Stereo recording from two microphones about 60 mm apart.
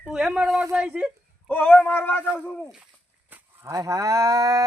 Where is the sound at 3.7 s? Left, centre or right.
Right.